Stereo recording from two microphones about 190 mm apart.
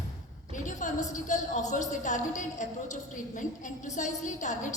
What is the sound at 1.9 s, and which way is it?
A woman's voice, 40° left (ahead or behind).